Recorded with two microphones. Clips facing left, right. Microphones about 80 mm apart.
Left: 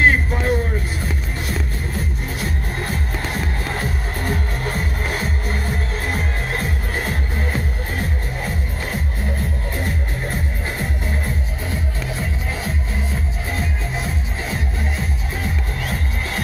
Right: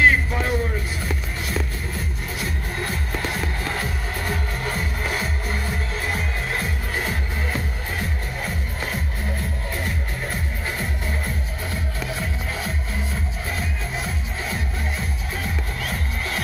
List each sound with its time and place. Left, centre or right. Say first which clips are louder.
0.0 s music: left 1 dB; left
2.8 s music: even; left